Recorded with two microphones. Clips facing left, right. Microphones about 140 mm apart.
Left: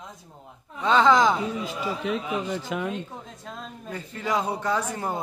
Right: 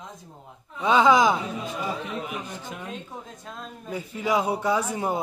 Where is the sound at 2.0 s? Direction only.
90° left.